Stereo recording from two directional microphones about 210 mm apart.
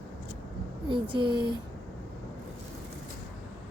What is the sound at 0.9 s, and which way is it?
Speech, 25° right (ahead or behind).